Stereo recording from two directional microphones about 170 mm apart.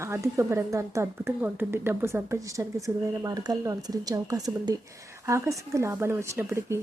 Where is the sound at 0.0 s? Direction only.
15° right (ahead or behind).